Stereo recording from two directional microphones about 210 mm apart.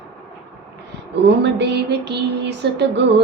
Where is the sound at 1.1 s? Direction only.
55° right (ahead or behind).